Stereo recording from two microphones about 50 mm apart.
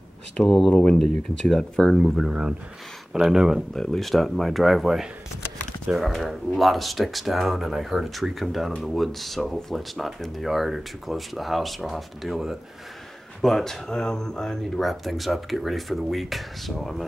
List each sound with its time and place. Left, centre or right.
0.5 s speech: centre
0.7 s speech: centre
2.0 s speech: centre
3.7 s speech: centre